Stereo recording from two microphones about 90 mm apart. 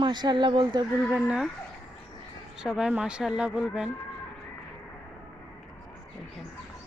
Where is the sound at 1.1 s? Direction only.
10° right (ahead or behind).